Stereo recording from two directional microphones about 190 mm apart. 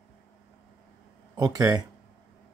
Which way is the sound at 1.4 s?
20° right (ahead or behind).